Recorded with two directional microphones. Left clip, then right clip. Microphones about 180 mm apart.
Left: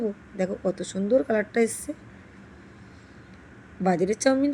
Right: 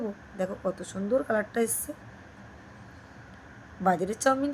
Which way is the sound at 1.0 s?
10° left (ahead or behind).